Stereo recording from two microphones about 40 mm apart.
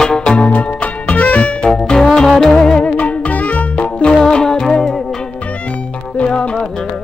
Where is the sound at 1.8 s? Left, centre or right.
Centre.